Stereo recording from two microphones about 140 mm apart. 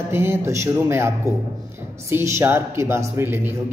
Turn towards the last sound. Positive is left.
turn(degrees=-15)  # may be behind; listen again after turning